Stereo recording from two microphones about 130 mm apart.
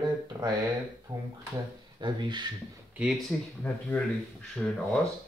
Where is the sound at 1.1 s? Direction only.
30° right (ahead or behind).